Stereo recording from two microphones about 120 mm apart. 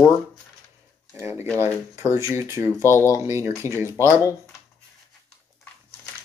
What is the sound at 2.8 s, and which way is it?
Speech, 20° left (ahead or behind).